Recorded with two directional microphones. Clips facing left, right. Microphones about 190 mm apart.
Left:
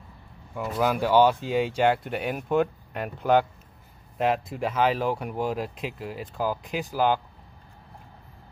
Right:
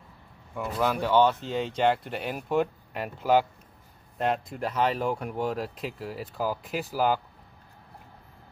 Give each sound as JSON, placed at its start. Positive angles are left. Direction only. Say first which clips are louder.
{"t": 0.6, "sound": "speech", "louder": "left 2 dB", "side_deg": 5}